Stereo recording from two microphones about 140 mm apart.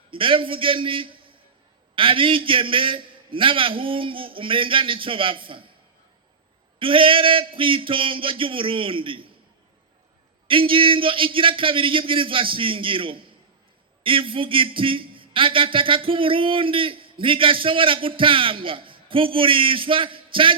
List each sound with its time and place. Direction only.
0.1 s a man's voice: 40° right (ahead or behind)
6.7 s a man's voice: 40° right (ahead or behind)
10.5 s a man's voice: 40° right (ahead or behind)